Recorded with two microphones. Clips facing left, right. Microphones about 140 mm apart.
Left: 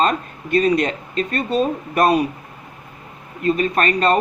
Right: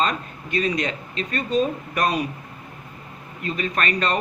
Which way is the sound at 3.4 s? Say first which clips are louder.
Left 7 dB; 40° left (ahead or behind).